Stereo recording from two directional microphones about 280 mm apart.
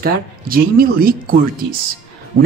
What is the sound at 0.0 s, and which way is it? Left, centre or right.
Speech, right.